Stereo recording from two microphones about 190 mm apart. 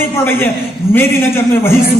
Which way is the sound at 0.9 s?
10° left (ahead or behind).